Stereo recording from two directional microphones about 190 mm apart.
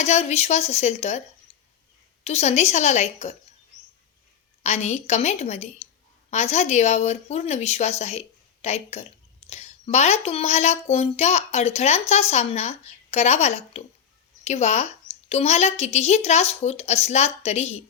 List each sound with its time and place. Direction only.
0.0 s a woman's voice: 35° left (ahead or behind)
1.5 s a sound: 35° left (ahead or behind)
2.2 s a woman's voice: 35° left (ahead or behind)
4.6 s a woman's voice: 35° left (ahead or behind)